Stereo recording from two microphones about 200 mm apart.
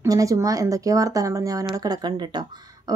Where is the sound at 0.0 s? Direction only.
15° right (ahead or behind).